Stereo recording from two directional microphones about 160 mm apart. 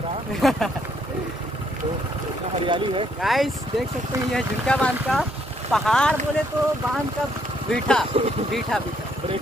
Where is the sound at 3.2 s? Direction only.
Centre (ahead or behind).